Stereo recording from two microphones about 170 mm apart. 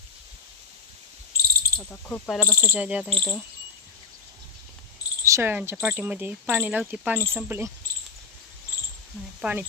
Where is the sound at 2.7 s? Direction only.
5° right (ahead or behind).